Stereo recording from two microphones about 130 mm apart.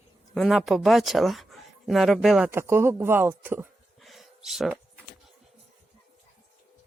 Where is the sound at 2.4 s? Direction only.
20° right (ahead or behind).